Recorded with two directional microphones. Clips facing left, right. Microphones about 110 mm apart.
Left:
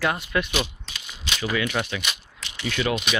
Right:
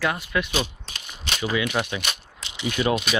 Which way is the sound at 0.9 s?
45° right (ahead or behind).